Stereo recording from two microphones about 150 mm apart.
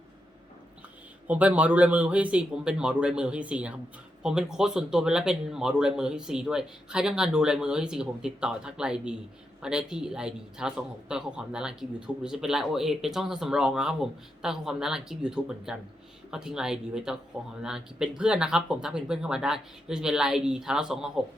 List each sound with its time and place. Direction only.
1.3 s a man's voice: 10° right (ahead or behind)